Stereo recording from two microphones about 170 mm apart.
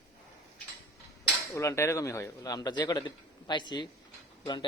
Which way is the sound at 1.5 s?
15° left (ahead or behind).